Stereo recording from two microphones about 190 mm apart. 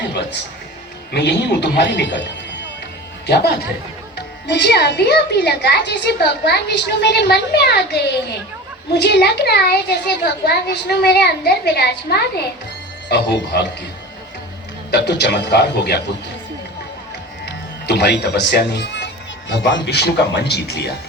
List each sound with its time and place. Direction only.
1.1 s a woman's voice: 65° left (ahead or behind)
3.2 s a woman's voice: 60° left (ahead or behind)
14.8 s a woman's voice: 60° left (ahead or behind)
17.4 s speech: 60° left (ahead or behind)